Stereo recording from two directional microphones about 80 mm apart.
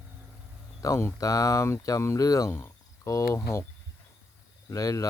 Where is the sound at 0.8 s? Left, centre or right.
Left.